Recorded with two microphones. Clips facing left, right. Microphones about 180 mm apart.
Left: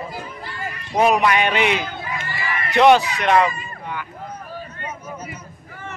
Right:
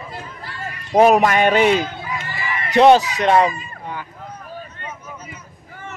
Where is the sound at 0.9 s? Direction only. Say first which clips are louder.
Right 4 dB; 45° right (ahead or behind).